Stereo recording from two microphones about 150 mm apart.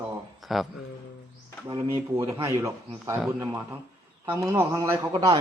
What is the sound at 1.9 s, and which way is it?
Speech, 20° right (ahead or behind).